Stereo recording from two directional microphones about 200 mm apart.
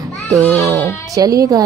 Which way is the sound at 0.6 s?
15° right (ahead or behind).